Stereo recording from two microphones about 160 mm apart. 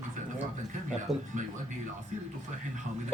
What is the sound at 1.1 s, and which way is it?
Speech, centre (ahead or behind).